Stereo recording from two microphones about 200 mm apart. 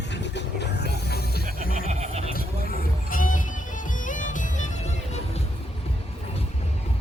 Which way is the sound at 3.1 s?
40° left (ahead or behind).